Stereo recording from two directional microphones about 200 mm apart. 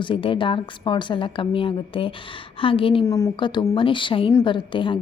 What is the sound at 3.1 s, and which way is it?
A woman's voice, 15° left (ahead or behind).